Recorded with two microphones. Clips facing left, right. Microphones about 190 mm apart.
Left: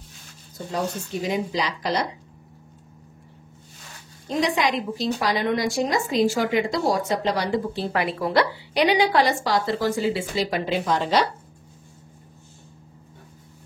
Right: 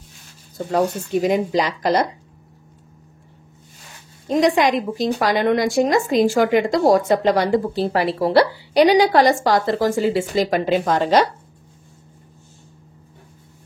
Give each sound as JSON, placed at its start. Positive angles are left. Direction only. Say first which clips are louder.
{"t": 0.6, "sound": "a woman's voice", "louder": "right 7 dB", "side_deg": -55}
{"t": 4.3, "sound": "a woman's voice", "louder": "right 6 dB", "side_deg": -50}